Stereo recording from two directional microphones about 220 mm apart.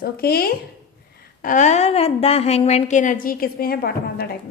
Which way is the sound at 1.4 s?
35° left (ahead or behind).